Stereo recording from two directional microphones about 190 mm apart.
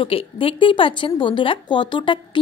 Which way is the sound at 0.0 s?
30° left (ahead or behind).